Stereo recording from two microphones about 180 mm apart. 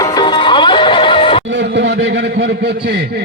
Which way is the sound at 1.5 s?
85° right.